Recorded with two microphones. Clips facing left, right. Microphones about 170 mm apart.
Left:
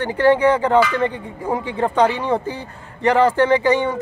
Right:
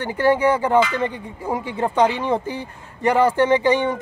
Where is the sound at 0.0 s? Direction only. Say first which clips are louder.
Left 3 dB; 10° right (ahead or behind).